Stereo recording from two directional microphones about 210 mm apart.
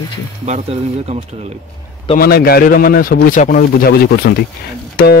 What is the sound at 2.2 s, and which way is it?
A man's voice, 45° left (ahead or behind).